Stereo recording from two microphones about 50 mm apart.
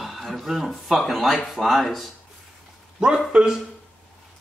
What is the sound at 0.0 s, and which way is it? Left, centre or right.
Speech, centre.